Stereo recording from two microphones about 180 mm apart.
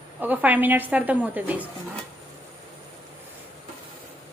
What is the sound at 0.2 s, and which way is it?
A woman's voice, 10° right (ahead or behind).